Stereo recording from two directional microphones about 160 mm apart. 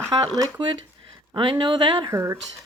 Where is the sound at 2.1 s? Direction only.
20° right (ahead or behind).